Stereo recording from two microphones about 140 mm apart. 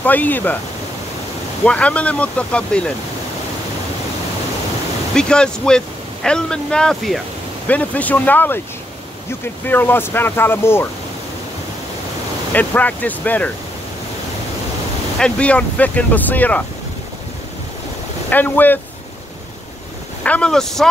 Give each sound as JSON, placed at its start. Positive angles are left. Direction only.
{"t": 0.0, "sound": "speech", "side_deg": 10}
{"t": 1.6, "sound": "speech", "side_deg": 10}
{"t": 5.1, "sound": "speech", "side_deg": 5}
{"t": 9.7, "sound": "speech", "side_deg": 15}
{"t": 12.5, "sound": "speech", "side_deg": 10}
{"t": 15.1, "sound": "speech", "side_deg": 10}
{"t": 18.3, "sound": "speech", "side_deg": 15}
{"t": 20.2, "sound": "speech", "side_deg": 5}